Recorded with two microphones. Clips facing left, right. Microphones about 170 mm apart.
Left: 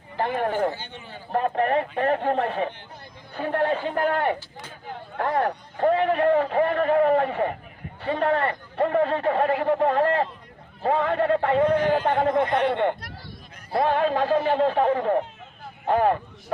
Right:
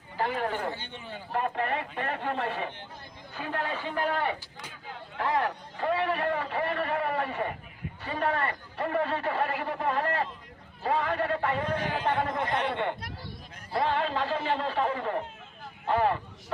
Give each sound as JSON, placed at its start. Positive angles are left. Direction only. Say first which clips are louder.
{"t": 1.3, "sound": "a man's voice", "louder": "left 7 dB", "side_deg": 50}